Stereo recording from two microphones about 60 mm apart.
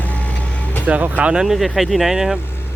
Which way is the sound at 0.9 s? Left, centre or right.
Right.